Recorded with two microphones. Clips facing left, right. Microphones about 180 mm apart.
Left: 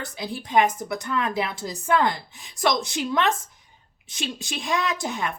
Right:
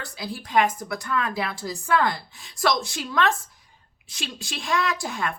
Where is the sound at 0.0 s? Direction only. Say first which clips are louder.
Left 2 dB; 20° left (ahead or behind).